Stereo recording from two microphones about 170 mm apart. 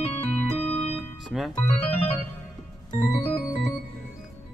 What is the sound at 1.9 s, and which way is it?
Organ, 35° left (ahead or behind).